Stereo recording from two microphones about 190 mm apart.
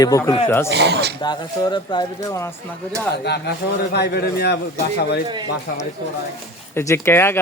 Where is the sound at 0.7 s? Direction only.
65° right (ahead or behind).